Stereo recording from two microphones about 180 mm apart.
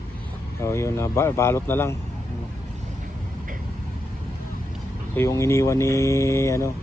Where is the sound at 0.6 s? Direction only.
15° left (ahead or behind).